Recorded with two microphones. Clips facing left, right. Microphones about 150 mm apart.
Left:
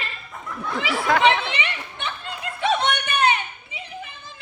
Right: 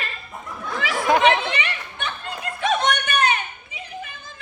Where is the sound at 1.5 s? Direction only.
25° left (ahead or behind).